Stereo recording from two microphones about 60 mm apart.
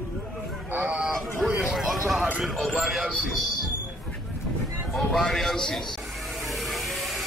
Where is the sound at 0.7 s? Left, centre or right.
Right.